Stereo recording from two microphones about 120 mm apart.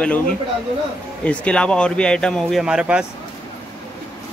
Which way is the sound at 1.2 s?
10° left (ahead or behind).